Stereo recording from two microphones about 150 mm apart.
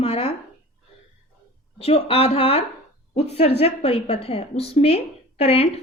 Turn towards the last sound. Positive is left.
turn(degrees=40)  # may be behind; listen again after turning